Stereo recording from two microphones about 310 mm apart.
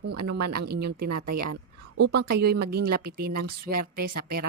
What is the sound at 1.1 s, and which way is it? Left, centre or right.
Speech, right.